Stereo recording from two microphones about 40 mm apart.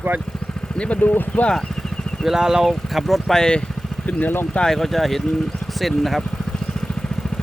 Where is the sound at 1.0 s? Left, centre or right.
Left.